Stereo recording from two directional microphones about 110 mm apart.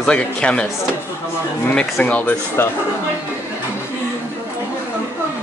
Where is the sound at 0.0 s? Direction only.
10° left (ahead or behind).